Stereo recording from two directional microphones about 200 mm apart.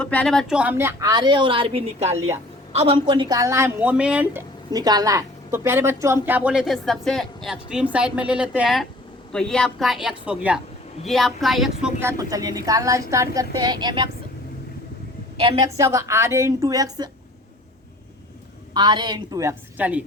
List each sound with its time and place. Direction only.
0.0 s a woman's voice: 5° left (ahead or behind)
4.7 s a woman's voice: 20° right (ahead or behind); by 11.9 s centre (ahead or behind)
11.9 s a woman's voice: 15° right (ahead or behind)
15.4 s a woman's voice: 20° right (ahead or behind)
18.7 s a woman's voice: 20° right (ahead or behind)